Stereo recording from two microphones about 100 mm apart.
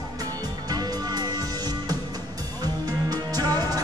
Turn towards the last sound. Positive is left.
turn(degrees=-40)  # may be behind; listen again after turning